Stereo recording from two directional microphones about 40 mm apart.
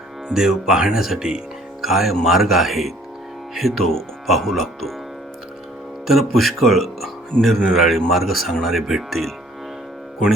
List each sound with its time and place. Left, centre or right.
0.3 s speech: centre
6.1 s speech: centre
7.3 s speech: left
7.7 s speech: centre